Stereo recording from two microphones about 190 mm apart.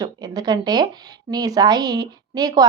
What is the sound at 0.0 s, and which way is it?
A woman's voice, 20° right (ahead or behind).